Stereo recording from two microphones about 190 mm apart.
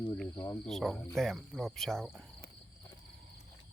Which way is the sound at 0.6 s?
Centre (ahead or behind).